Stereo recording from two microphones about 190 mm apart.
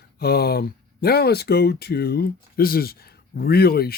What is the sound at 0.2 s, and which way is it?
Speech, 55° left (ahead or behind).